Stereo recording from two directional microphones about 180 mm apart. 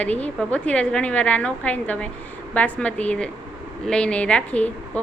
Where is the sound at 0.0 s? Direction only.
5° left (ahead or behind).